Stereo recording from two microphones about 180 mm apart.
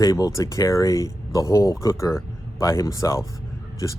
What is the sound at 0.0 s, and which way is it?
Speech, 20° left (ahead or behind).